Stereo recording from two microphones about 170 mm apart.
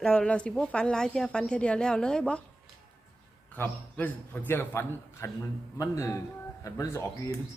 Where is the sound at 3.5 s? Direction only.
10° left (ahead or behind).